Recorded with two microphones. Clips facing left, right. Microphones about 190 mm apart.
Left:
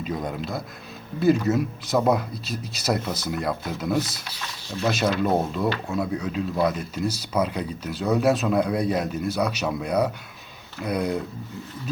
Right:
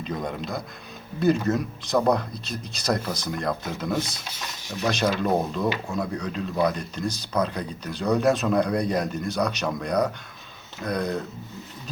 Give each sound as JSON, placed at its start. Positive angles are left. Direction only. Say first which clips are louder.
{"t": 0.0, "sound": "speech", "louder": "left 1 dB", "side_deg": 5}
{"t": 4.3, "sound": "speech", "louder": "left 1 dB", "side_deg": -15}
{"t": 4.9, "sound": "speech", "louder": "left 1 dB", "side_deg": 5}